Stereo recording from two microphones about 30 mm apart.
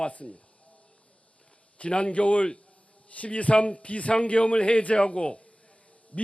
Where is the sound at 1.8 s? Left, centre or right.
Left.